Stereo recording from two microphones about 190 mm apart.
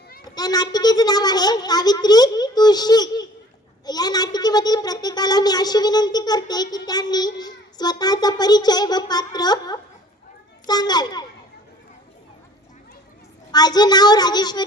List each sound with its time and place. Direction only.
0.3 s a child's voice: 20° left (ahead or behind)
13.5 s a child's voice: 20° left (ahead or behind)